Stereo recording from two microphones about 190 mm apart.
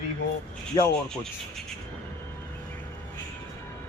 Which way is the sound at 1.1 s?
5° left (ahead or behind).